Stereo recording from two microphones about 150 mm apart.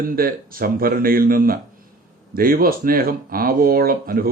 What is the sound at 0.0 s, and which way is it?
Speech, 70° right (ahead or behind).